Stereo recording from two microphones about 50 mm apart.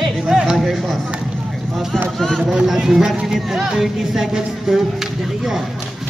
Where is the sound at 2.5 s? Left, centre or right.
Centre.